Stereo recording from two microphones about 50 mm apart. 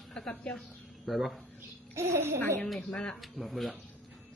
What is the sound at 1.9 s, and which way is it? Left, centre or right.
Speech, right.